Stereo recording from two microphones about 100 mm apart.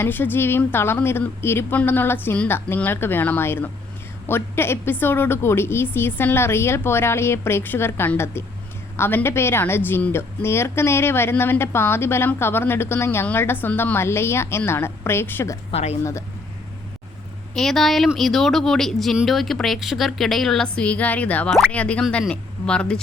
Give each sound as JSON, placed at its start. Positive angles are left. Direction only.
{"t": 0.0, "sound": "a woman's voice", "side_deg": 20}
{"t": 15.7, "sound": "speech", "side_deg": 90}
{"t": 17.5, "sound": "speech", "side_deg": 5}